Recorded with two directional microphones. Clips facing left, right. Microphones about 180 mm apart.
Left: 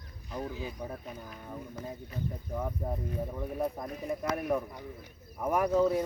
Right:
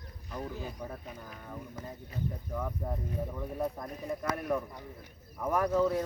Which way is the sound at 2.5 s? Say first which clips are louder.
Left 3 dB; 20° left (ahead or behind).